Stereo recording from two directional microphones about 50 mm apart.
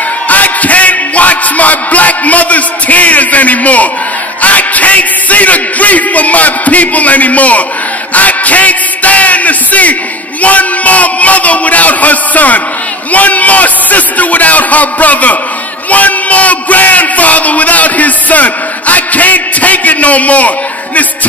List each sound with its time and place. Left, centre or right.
0.3 s speech: left
8.1 s music: left
10.4 s speech: left